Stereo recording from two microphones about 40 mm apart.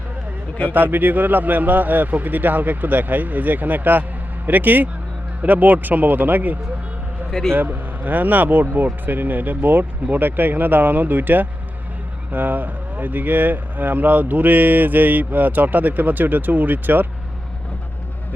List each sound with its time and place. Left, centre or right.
0.7 s speech: right